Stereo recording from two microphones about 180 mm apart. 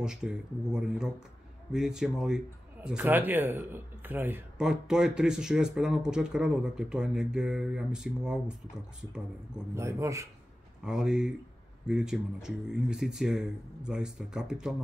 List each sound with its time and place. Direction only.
0.0 s a man's voice: 5° right (ahead or behind)
9.8 s speech: 15° right (ahead or behind)
10.8 s a man's voice: 5° right (ahead or behind)